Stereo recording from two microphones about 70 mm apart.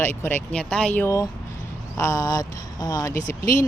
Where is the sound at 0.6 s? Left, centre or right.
Centre.